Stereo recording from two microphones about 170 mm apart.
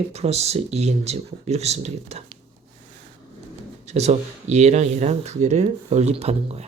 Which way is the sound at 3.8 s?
40° right (ahead or behind).